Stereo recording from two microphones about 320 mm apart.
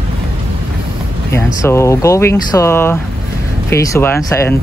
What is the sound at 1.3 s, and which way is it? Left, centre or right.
Speech, centre.